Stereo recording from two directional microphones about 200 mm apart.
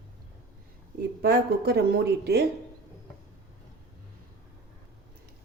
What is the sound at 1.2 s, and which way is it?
Speech, 50° right (ahead or behind).